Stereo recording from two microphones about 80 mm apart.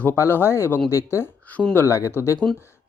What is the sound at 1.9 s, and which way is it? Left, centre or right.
Speech, left.